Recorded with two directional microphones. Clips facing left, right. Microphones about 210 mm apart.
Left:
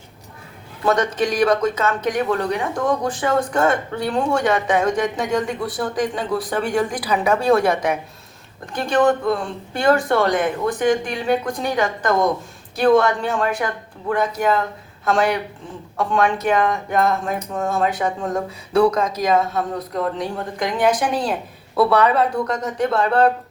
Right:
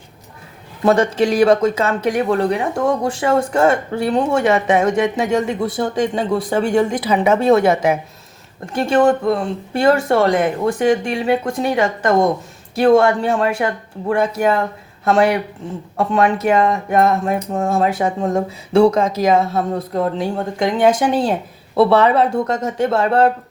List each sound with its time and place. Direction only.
0.9 s speech: 25° right (ahead or behind)
15.0 s speech: 25° right (ahead or behind)